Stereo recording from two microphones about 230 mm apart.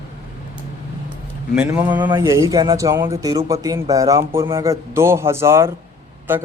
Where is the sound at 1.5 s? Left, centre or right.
Centre.